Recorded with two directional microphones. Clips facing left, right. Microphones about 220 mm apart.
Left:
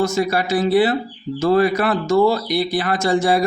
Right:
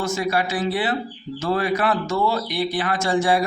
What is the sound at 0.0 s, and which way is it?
Speech, 40° left (ahead or behind).